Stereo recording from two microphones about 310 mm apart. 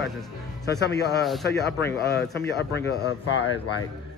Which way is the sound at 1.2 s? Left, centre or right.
Centre.